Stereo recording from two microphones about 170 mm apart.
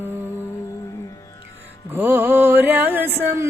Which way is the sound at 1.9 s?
10° right (ahead or behind).